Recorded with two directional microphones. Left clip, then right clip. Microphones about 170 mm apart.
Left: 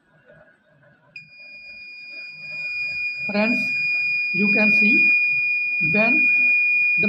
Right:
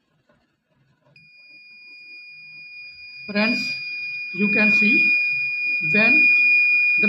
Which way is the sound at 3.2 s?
5° left (ahead or behind).